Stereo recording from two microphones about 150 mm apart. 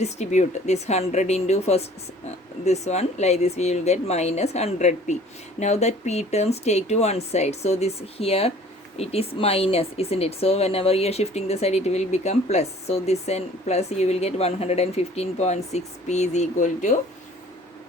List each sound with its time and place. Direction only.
0.0 s speech: 50° left (ahead or behind)